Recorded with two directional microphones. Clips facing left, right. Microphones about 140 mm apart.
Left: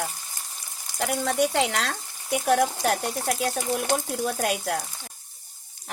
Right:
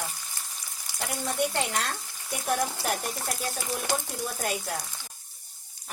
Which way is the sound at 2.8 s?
85° left.